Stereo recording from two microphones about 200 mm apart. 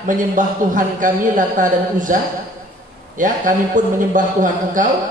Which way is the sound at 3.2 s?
40° right (ahead or behind).